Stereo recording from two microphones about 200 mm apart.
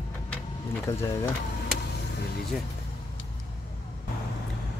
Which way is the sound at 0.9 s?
15° left (ahead or behind).